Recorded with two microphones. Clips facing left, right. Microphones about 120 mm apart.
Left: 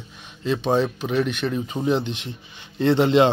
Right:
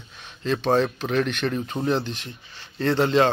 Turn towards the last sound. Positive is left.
turn(degrees=20)  # may be behind; listen again after turning